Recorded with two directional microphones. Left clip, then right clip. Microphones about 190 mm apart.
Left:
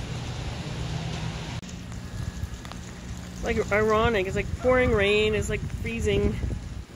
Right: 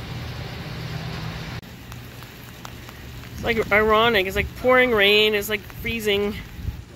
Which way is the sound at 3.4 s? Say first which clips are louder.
Right 5 dB; 10° right (ahead or behind).